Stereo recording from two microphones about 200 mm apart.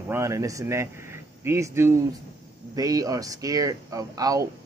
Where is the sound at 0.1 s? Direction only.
15° right (ahead or behind).